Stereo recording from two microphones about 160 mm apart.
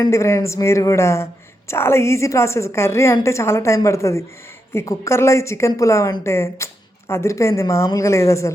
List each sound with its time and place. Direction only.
0.0 s a woman's voice: 15° left (ahead or behind)